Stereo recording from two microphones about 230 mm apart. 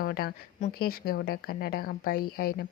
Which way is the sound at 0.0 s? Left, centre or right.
Left.